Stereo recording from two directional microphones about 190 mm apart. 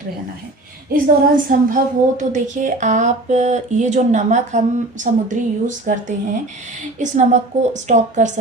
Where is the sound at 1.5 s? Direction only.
45° right (ahead or behind).